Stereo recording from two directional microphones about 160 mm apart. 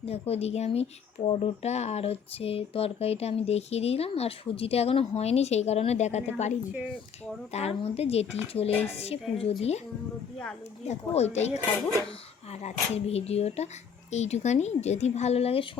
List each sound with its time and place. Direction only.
0.0 s speech: 40° left (ahead or behind)
8.7 s speech: 10° left (ahead or behind)
9.0 s speech: 40° left (ahead or behind)
10.8 s speech: 45° left (ahead or behind)